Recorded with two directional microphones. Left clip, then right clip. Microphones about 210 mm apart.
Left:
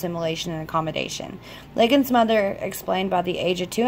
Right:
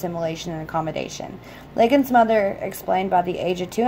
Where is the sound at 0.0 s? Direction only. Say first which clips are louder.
Even; 30° left (ahead or behind).